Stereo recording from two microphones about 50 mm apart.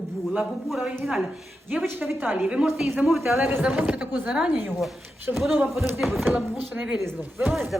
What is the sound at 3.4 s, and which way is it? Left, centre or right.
Speech, right.